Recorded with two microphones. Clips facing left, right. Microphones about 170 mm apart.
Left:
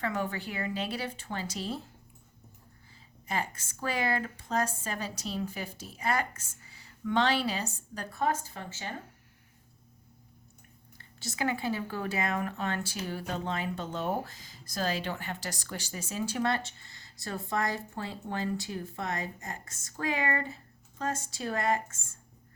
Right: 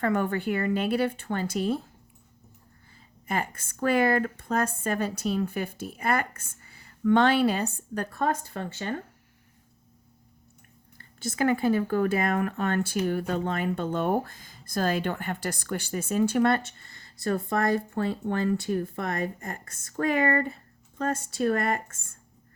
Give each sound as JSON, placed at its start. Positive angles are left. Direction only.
{"t": 0.0, "sound": "speech", "side_deg": -55}
{"t": 3.2, "sound": "speech", "side_deg": -55}
{"t": 10.9, "sound": "speech", "side_deg": -50}